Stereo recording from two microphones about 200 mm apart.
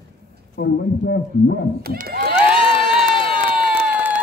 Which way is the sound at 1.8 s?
50° right (ahead or behind).